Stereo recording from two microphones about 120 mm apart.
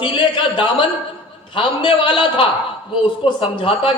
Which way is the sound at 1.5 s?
45° left (ahead or behind).